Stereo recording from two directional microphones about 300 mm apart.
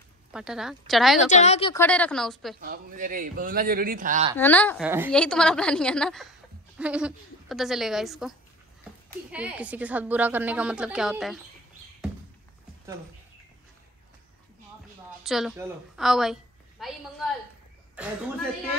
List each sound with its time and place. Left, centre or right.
0.3 s a woman's voice: centre
1.3 s a woman's voice: left
1.8 s a woman's voice: centre
2.6 s speech: right
4.4 s a woman's voice: centre
4.8 s a woman's voice: centre
15.2 s a woman's voice: centre